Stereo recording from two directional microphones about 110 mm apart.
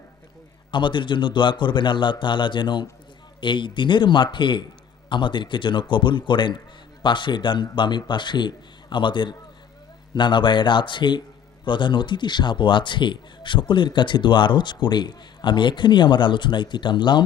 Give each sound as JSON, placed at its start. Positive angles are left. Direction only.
{"t": 0.7, "sound": "speech", "side_deg": 45}